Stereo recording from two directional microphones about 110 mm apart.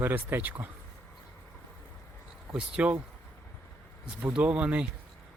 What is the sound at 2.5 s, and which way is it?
Speech, 10° right (ahead or behind).